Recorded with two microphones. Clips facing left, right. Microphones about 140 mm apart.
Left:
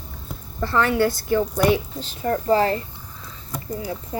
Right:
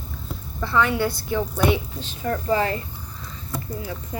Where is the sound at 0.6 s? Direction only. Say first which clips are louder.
Left 2 dB; 50° left (ahead or behind).